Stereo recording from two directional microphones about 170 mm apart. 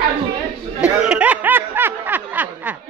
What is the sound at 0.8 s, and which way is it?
Snicker, 5° right (ahead or behind).